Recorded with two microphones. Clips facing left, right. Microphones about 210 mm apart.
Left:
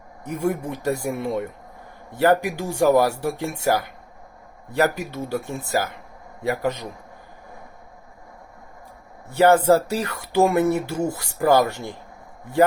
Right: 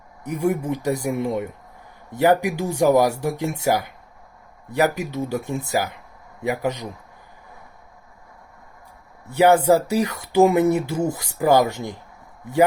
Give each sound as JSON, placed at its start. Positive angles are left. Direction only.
{"t": 0.3, "sound": "speech", "side_deg": -15}
{"t": 9.3, "sound": "speech", "side_deg": -15}